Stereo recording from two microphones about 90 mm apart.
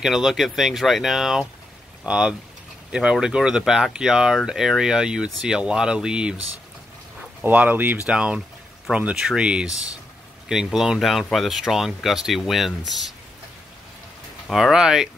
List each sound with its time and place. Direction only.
0.0 s speech: 5° right (ahead or behind)
7.4 s speech: 20° right (ahead or behind); by 13.1 s centre (ahead or behind)
14.5 s speech: 5° right (ahead or behind)